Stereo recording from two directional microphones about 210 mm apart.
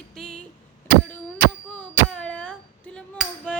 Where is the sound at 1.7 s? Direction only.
5° left (ahead or behind).